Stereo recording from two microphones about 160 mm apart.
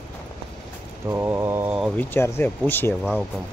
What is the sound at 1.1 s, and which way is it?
Mantra, 15° right (ahead or behind).